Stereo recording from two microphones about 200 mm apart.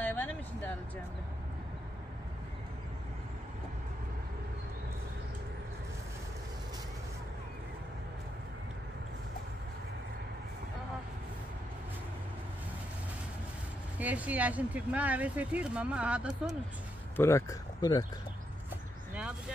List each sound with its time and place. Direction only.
0.0 s vehicle: 10° left (ahead or behind)
13.9 s speech: 5° right (ahead or behind)
17.2 s speech: 15° left (ahead or behind)
18.7 s a sound: 5° right (ahead or behind)